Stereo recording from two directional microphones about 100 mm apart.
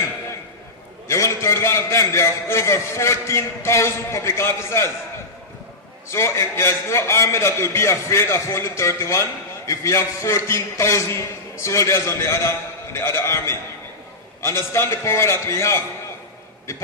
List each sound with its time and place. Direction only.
1.0 s a man's voice: 30° left (ahead or behind)
6.0 s a man's voice: 25° left (ahead or behind)